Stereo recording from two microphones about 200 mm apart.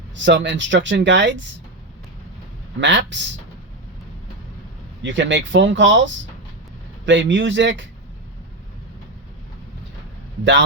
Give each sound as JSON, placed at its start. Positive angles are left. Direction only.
{"t": 0.3, "sound": "speech", "side_deg": -65}
{"t": 2.8, "sound": "speech", "side_deg": -60}
{"t": 5.0, "sound": "speech", "side_deg": -65}
{"t": 7.0, "sound": "speech", "side_deg": -65}